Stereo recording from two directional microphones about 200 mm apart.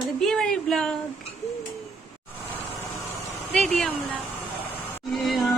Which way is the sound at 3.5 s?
5° left (ahead or behind).